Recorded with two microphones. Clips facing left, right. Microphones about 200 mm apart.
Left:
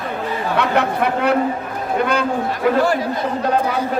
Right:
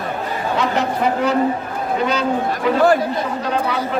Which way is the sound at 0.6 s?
60° left (ahead or behind).